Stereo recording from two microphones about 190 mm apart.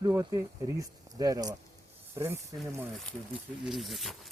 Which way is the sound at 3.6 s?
Centre (ahead or behind).